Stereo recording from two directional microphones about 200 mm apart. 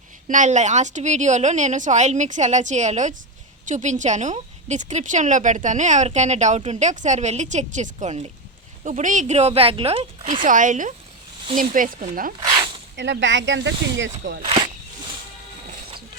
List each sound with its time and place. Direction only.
0.3 s a woman's voice: 40° right (ahead or behind)
12.4 s a sound: 20° right (ahead or behind)
13.0 s speech: 65° right (ahead or behind)
14.4 s speech: 25° right (ahead or behind)